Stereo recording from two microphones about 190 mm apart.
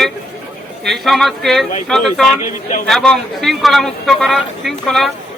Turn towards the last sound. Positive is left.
turn(degrees=0)  # may be behind; listen again after turning